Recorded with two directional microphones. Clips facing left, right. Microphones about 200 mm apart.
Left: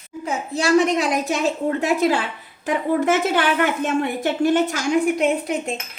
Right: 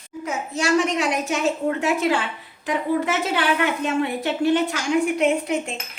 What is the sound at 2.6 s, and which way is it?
A woman's voice, 50° left (ahead or behind).